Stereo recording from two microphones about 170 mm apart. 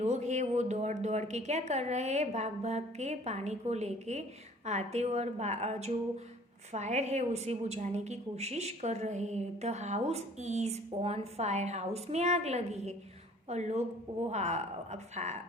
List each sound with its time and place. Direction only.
0.0 s a woman's voice: 40° right (ahead or behind)